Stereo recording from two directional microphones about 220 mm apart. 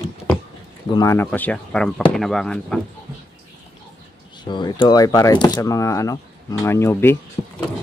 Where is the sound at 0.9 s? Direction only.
10° left (ahead or behind).